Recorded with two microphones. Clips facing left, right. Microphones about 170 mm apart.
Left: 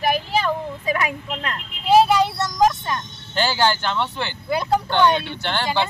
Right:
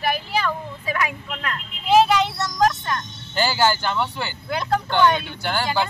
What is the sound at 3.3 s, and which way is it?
Speech, 5° right (ahead or behind).